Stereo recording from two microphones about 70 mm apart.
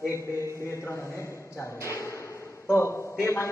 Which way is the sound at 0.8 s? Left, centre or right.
Left.